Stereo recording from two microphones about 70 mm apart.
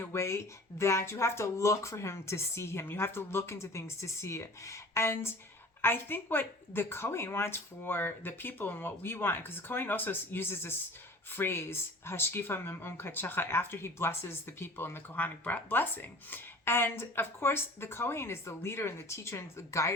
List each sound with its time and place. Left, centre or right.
0.0 s speech: left